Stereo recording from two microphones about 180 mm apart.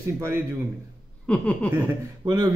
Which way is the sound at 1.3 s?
5° left (ahead or behind).